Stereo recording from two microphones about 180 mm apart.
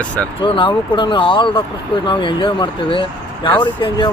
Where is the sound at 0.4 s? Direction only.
25° left (ahead or behind).